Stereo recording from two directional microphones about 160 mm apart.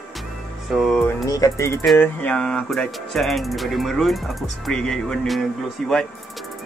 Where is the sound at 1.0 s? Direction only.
20° left (ahead or behind).